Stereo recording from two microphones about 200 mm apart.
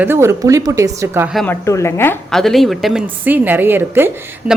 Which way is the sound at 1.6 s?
15° left (ahead or behind).